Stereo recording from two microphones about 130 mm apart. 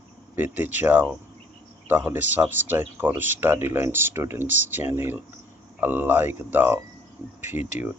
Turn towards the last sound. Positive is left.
turn(degrees=-15)  # may be behind; listen again after turning